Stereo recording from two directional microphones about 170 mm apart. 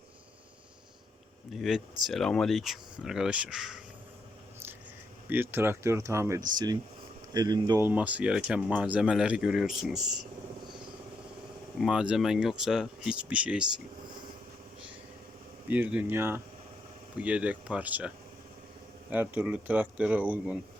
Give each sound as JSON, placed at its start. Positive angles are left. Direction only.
{"t": 1.5, "sound": "speech", "side_deg": 0}
{"t": 5.3, "sound": "speech", "side_deg": -10}
{"t": 7.9, "sound": "speech", "side_deg": -10}
{"t": 11.8, "sound": "speech", "side_deg": -5}
{"t": 15.7, "sound": "speech", "side_deg": -10}
{"t": 19.1, "sound": "speech", "side_deg": -10}